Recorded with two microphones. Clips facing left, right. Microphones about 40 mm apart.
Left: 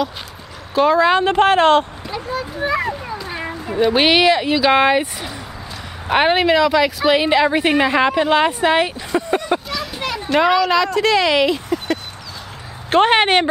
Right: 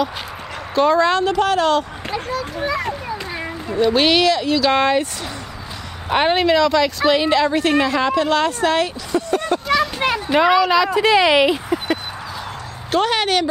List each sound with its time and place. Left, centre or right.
0.7 s speech: centre
1.2 s a woman's voice: left
2.3 s a child's voice: centre
3.3 s speech: centre
9.9 s children playing: right
10.3 s speech: centre
12.9 s a woman's voice: left